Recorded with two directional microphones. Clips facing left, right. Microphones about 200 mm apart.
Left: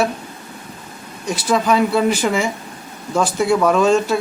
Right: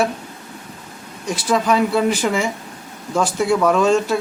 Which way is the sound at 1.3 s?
5° left (ahead or behind).